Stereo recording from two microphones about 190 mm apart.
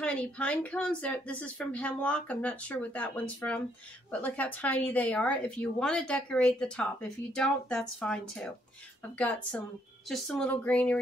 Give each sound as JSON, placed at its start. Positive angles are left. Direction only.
{"t": 0.0, "sound": "speech", "side_deg": 5}